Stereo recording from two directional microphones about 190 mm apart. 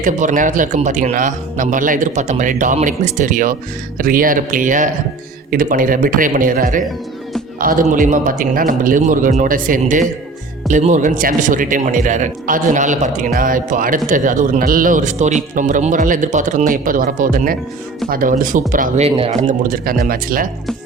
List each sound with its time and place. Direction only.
0.0 s a man's voice: 40° right (ahead or behind)